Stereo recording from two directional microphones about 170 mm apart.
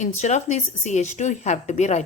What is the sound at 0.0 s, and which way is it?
Speech, 40° left (ahead or behind).